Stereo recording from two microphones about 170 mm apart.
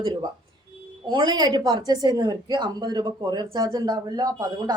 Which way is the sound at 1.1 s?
25° right (ahead or behind).